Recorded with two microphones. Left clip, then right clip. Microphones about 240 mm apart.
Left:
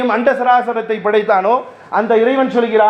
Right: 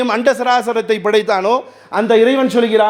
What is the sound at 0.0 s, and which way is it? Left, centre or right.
Speech, right.